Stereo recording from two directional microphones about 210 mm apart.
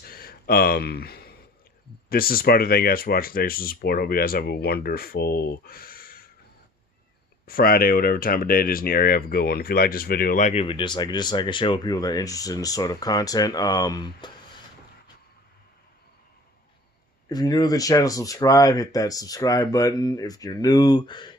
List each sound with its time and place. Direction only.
0.0 s a sound: 45° left (ahead or behind)
2.0 s speech: 45° left (ahead or behind)
7.4 s speech: 45° left (ahead or behind); by 14.3 s 20° left (ahead or behind)
17.2 s speech: 15° left (ahead or behind)